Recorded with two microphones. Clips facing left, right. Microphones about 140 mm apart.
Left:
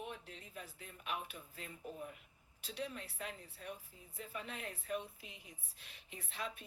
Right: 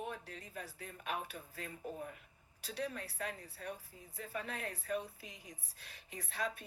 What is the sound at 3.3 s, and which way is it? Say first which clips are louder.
Speech: right 3 dB; 75° right (ahead or behind).